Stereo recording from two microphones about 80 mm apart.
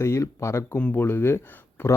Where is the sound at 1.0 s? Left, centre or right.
Left.